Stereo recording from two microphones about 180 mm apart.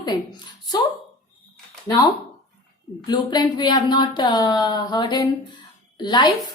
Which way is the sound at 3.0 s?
25° left (ahead or behind).